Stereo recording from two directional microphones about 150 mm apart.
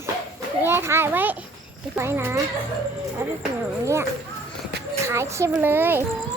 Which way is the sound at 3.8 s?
20° right (ahead or behind).